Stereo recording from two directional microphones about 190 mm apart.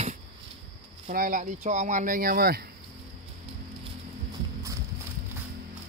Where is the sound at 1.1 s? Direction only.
45° right (ahead or behind).